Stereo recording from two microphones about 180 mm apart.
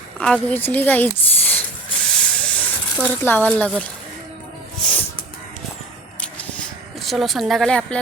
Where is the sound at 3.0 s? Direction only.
10° left (ahead or behind).